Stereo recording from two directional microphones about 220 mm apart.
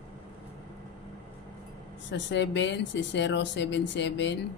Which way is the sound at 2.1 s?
55° left (ahead or behind).